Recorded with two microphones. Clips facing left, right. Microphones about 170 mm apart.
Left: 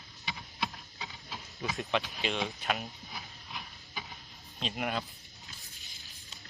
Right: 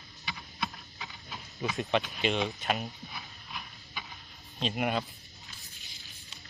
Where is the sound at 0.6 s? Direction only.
20° left (ahead or behind).